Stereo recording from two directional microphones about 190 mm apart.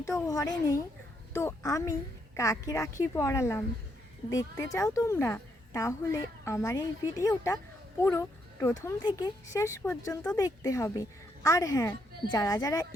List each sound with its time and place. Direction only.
0.0 s a woman's voice: 15° left (ahead or behind)